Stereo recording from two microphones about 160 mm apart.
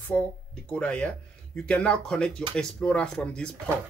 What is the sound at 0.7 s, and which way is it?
Speech, 5° left (ahead or behind).